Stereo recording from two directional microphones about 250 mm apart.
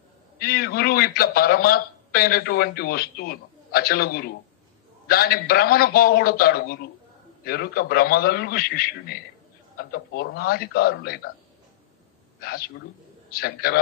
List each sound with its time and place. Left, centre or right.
0.4 s a man's voice: left
12.4 s a man's voice: left